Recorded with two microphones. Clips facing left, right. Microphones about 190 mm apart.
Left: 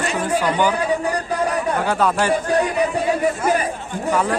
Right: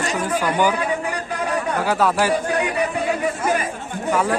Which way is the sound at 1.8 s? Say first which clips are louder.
Right 1 dB; 5° right (ahead or behind).